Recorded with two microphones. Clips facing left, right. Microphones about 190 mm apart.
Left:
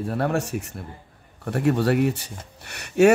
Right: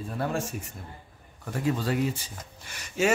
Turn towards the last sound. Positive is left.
turn(degrees=65)  # may be behind; listen again after turning